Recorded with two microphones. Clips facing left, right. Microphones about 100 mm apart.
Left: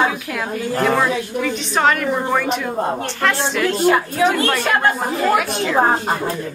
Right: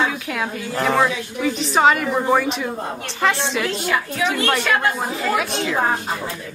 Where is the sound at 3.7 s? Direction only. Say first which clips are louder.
Left 7 dB; 35° left (ahead or behind).